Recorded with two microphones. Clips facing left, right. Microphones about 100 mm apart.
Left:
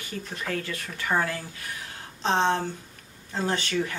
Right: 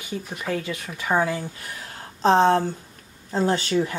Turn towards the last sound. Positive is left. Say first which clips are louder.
# right 5 dB
turn(degrees=-25)  # may be behind; listen again after turning